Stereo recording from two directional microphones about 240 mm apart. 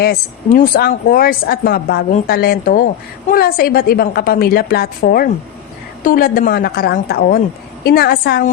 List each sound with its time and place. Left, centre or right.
0.0 s speech: left